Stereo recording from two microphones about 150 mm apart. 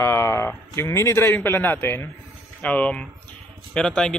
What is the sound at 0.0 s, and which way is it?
Speech, 20° left (ahead or behind).